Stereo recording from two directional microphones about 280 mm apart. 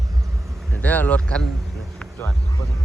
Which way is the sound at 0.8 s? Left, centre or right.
Centre.